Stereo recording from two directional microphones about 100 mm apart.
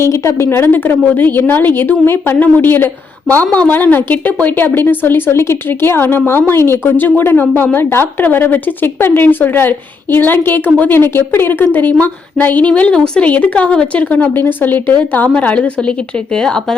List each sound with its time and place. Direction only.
0.0 s a woman's voice: 30° left (ahead or behind); by 16.7 s 5° left (ahead or behind)